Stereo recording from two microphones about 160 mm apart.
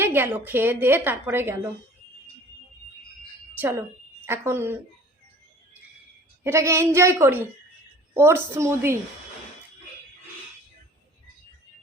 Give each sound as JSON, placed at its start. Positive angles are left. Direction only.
{"t": 0.0, "sound": "a woman's voice", "side_deg": -15}
{"t": 3.6, "sound": "a woman's voice", "side_deg": -15}
{"t": 6.4, "sound": "a woman's voice", "side_deg": -15}